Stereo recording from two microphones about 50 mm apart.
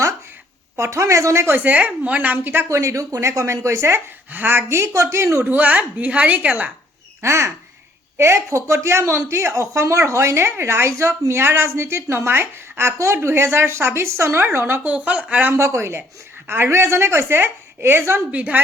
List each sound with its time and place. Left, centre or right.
0.8 s a woman's voice: right
1.5 s a woman's voice: right
2.6 s speech: right
4.3 s speech: right
4.8 s a woman's voice: right
5.4 s a woman's voice: right
7.2 s a woman's voice: right
10.4 s a woman's voice: right
11.3 s a woman's voice: right
14.3 s speech: right
14.8 s speech: right
15.5 s a woman's voice: right
18.3 s speech: right